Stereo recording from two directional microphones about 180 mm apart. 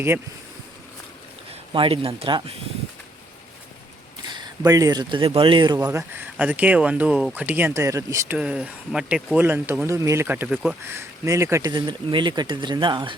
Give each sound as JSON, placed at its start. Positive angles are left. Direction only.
{"t": 1.7, "sound": "speech", "side_deg": -30}
{"t": 4.3, "sound": "speech", "side_deg": -20}
{"t": 8.4, "sound": "speech", "side_deg": -5}
{"t": 10.9, "sound": "speech", "side_deg": -15}